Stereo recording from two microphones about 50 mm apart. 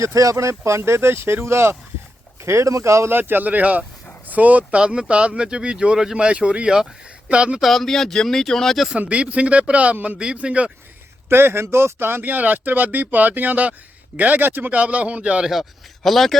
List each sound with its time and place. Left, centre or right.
0.0 s speech: right
2.4 s speech: right
3.1 s speech: right
4.8 s speech: centre
7.6 s speech: centre
9.0 s speech: right
11.3 s speech: right
16.0 s a man's voice: centre